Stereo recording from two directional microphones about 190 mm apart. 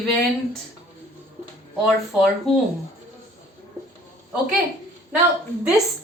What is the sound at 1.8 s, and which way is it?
Speech, centre (ahead or behind).